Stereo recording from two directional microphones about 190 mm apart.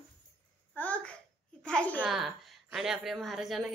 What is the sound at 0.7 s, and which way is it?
Babbling, 5° left (ahead or behind).